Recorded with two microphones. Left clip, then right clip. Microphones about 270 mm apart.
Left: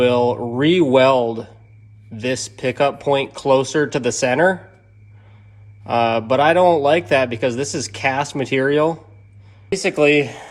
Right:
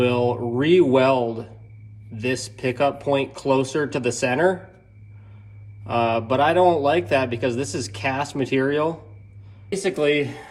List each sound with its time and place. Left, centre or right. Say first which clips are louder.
0.0 s a man's voice: left 5 dB; left
5.8 s a man's voice: left 4 dB; left